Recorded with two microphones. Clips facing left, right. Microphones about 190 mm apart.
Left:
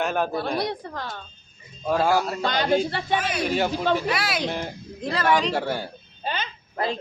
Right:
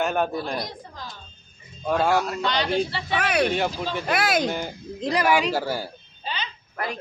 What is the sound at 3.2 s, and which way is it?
Speech, 65° right (ahead or behind).